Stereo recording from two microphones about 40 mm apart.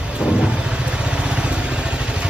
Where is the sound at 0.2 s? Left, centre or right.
Right.